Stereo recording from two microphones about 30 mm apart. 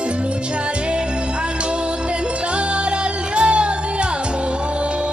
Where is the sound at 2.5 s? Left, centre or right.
Right.